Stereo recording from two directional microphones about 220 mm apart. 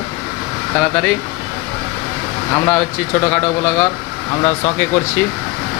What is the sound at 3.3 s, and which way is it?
Speech, 10° left (ahead or behind).